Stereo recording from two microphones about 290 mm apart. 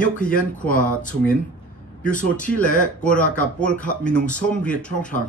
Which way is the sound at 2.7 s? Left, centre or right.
Left.